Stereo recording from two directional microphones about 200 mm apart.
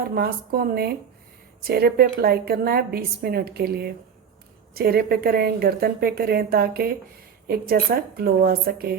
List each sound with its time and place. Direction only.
0.1 s a woman's voice: 50° right (ahead or behind)